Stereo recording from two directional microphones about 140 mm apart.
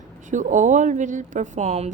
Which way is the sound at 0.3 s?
65° right (ahead or behind).